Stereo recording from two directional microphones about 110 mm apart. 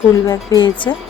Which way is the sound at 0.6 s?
45° left (ahead or behind).